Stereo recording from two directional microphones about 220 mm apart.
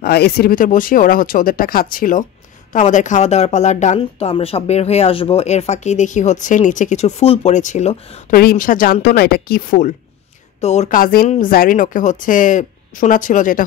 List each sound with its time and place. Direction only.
0.0 s speech: 45° left (ahead or behind); by 8.4 s 30° left (ahead or behind)
8.4 s speech: 40° left (ahead or behind)